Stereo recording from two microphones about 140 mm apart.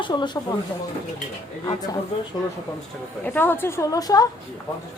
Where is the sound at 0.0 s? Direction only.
30° left (ahead or behind).